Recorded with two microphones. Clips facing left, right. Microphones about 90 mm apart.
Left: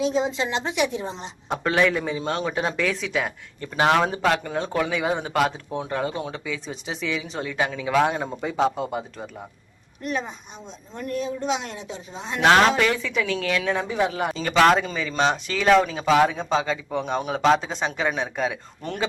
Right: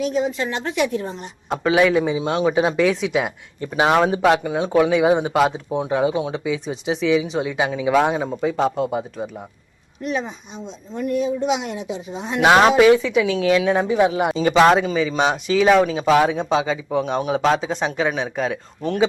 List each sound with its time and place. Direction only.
0.0 s a woman's voice: 25° left (ahead or behind)
1.5 s speech: 5° right (ahead or behind)
8.1 s speech: 5° right (ahead or behind)